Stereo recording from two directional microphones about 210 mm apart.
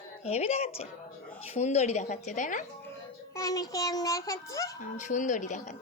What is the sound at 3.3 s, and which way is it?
Child singing, 15° left (ahead or behind).